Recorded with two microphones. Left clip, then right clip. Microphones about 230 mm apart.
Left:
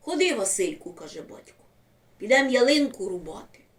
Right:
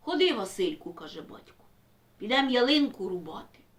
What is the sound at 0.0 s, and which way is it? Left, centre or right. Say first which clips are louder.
Speech: left 2 dB; centre.